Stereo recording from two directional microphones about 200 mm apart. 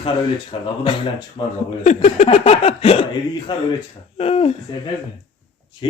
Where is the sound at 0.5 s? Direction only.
25° left (ahead or behind).